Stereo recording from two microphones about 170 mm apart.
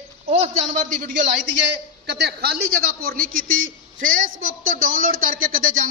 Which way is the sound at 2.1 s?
75° right (ahead or behind).